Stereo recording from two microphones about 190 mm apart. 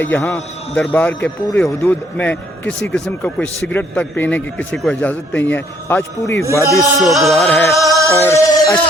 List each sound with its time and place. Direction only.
0.0 s a man's voice: 10° left (ahead or behind)
7.0 s music: centre (ahead or behind)
7.9 s music: 15° right (ahead or behind)
8.2 s a man's voice: 15° left (ahead or behind)